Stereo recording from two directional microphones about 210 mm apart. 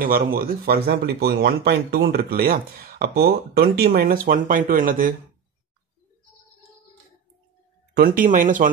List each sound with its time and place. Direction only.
0.0 s speech: 45° right (ahead or behind)
7.9 s speech: 40° right (ahead or behind)